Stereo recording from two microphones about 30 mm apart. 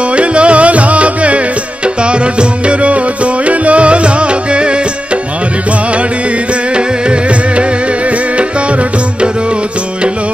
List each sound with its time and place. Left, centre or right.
0.1 s music: right